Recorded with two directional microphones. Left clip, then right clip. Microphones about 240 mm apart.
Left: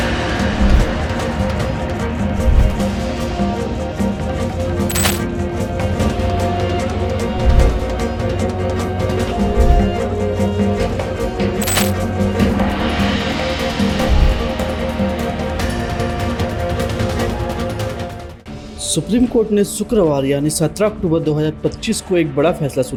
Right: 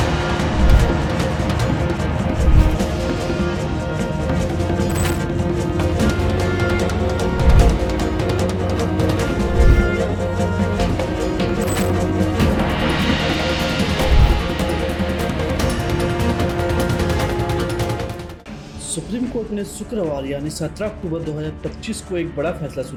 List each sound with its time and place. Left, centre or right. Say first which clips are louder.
19.1 s speech: left 10 dB; left